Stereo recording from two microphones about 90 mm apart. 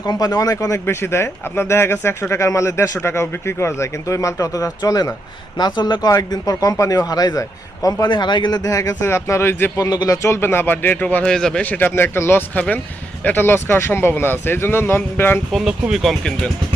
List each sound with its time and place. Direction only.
0.0 s speech: 40° left (ahead or behind)
8.0 s speech: 55° left (ahead or behind); by 9.7 s 25° left (ahead or behind)
9.7 s speech: 40° left (ahead or behind)
10.2 s speech: 30° left (ahead or behind)
11.3 s a man's voice: 5° left (ahead or behind)
11.6 s speech: 20° left (ahead or behind)
15.5 s speech: centre (ahead or behind)